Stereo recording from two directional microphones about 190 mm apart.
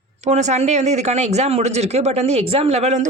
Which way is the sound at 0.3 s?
35° right (ahead or behind).